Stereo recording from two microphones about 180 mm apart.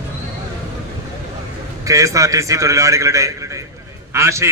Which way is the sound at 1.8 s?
20° right (ahead or behind).